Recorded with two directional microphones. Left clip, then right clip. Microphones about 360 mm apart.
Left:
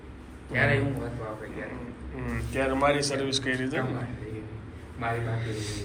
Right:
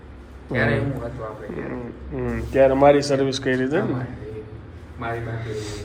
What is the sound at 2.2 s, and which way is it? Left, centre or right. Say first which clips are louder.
Speech: right 13 dB; centre.